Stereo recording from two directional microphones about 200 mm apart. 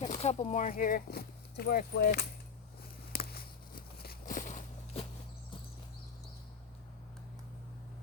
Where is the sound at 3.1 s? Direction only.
50° left (ahead or behind).